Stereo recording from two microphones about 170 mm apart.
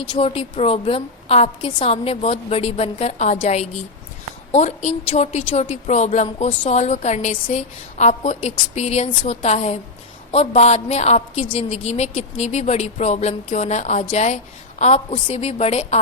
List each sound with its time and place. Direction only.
0.1 s a woman's voice: 35° left (ahead or behind)